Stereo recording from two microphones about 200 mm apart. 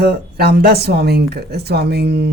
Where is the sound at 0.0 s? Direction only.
50° right (ahead or behind).